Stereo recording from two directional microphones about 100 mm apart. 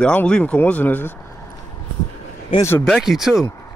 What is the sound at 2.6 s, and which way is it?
Speech, 30° left (ahead or behind).